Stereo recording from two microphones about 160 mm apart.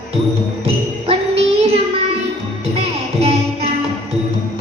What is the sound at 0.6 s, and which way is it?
Music, 40° right (ahead or behind).